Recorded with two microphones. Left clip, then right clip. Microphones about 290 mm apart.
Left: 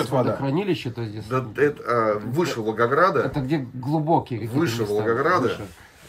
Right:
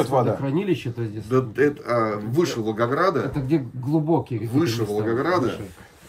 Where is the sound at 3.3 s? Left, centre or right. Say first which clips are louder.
Right 2 dB; left.